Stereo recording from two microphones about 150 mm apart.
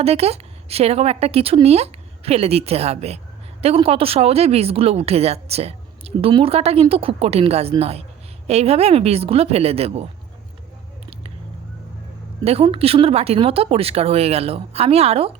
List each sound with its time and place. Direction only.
0.0 s a woman's voice: 45° right (ahead or behind)
12.5 s speech: 40° right (ahead or behind)